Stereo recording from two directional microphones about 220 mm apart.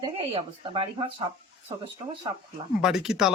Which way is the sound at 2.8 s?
Centre (ahead or behind).